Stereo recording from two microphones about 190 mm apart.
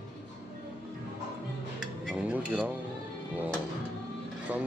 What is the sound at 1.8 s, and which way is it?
Music, 5° right (ahead or behind).